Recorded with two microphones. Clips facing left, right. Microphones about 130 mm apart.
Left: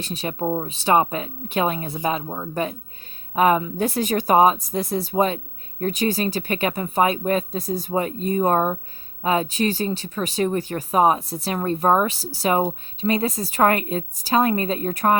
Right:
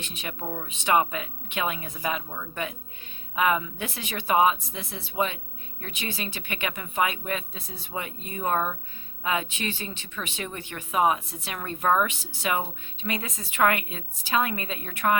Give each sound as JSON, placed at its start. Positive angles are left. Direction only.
{"t": 0.0, "sound": "speech", "side_deg": 35}